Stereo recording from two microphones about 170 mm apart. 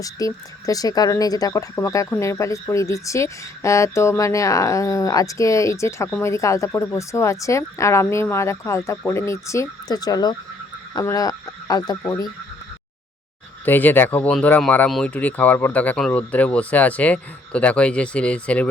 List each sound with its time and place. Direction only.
0.0 s speech: 20° left (ahead or behind)
13.7 s speech: 10° left (ahead or behind)